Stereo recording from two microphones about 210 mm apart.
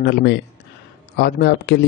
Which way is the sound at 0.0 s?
55° left (ahead or behind).